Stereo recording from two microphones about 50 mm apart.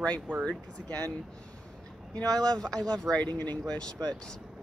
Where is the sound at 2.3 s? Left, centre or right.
Centre.